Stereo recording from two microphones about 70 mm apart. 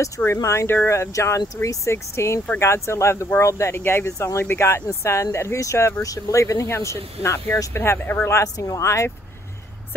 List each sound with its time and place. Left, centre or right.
0.4 s speech: left
8.5 s speech: left